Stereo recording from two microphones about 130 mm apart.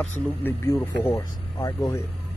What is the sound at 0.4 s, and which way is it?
Speech, 20° left (ahead or behind).